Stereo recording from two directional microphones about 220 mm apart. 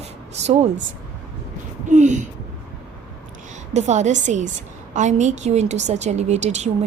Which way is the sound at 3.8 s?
30° right (ahead or behind).